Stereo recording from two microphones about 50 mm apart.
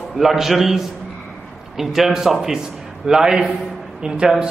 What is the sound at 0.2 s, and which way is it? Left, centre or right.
A man's voice, centre.